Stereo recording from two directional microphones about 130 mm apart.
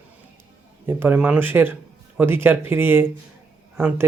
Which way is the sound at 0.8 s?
15° right (ahead or behind).